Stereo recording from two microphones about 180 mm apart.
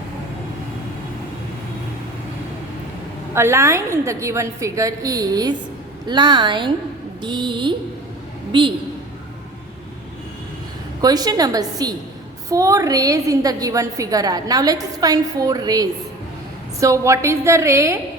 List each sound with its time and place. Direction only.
3.3 s a woman's voice: 15° right (ahead or behind)
11.0 s a woman's voice: 20° right (ahead or behind)